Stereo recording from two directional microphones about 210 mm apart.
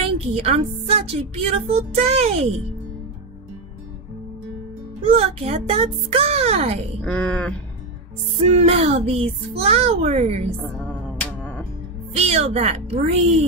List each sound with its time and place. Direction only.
0.0 s speech: 30° right (ahead or behind)
5.0 s speech: 30° right (ahead or behind)
7.0 s speech: 5° left (ahead or behind)
8.5 s speech: 30° right (ahead or behind)
12.2 s speech: 30° right (ahead or behind)